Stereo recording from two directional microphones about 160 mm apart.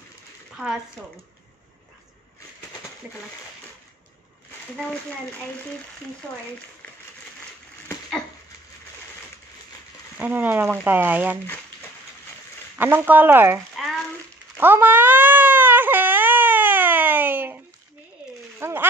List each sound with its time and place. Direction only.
3.0 s speech: 10° right (ahead or behind)
10.1 s speech: 10° right (ahead or behind)
12.7 s speech: 10° right (ahead or behind)
13.8 s frying: centre (ahead or behind)
14.6 s baby cry: 15° right (ahead or behind)
18.6 s a sound: 15° right (ahead or behind)